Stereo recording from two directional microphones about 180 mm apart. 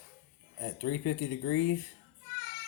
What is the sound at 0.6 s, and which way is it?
Speech, 50° left (ahead or behind).